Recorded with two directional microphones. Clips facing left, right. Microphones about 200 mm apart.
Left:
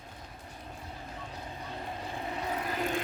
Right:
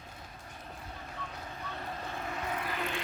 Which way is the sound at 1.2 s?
15° left (ahead or behind).